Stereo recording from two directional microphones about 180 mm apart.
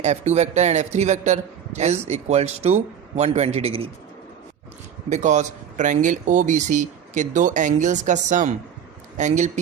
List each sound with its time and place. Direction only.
0.0 s a man's voice: 40° right (ahead or behind)
5.0 s a man's voice: 40° right (ahead or behind)